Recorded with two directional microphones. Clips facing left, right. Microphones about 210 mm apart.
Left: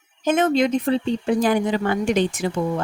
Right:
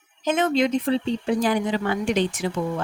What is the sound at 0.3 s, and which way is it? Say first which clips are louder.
Speech: left 3 dB; 50° left (ahead or behind).